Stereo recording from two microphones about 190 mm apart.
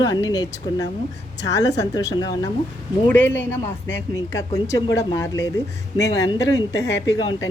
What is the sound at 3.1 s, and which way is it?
Speech, 10° left (ahead or behind).